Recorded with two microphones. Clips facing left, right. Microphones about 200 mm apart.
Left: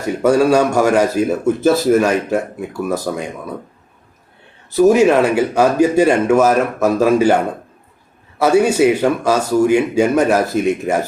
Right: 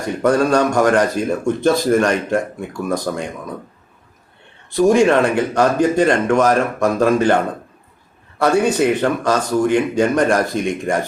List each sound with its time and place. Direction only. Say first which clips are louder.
0.0 s speech: left 3 dB; 5° left (ahead or behind)
4.7 s speech: left 2 dB; 5° left (ahead or behind)
8.4 s speech: left 3 dB; 5° left (ahead or behind)